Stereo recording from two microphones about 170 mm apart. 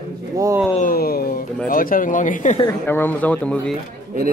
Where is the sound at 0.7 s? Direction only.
55° left (ahead or behind).